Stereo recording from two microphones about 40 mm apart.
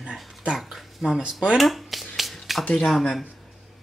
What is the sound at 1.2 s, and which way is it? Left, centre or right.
Speech, right.